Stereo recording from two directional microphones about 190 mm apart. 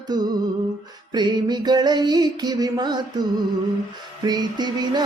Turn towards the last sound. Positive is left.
turn(degrees=-20)  # may be behind; listen again after turning